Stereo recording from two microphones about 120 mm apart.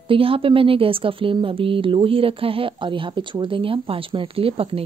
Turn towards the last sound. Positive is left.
turn(degrees=-50)  # may be behind; listen again after turning